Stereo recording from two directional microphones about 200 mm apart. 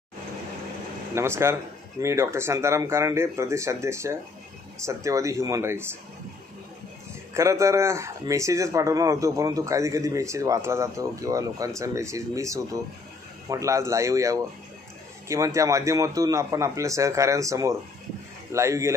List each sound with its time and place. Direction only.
1.1 s speech: 10° right (ahead or behind)
7.3 s speech: 15° right (ahead or behind)